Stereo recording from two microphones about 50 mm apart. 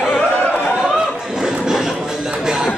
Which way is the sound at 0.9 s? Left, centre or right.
Centre.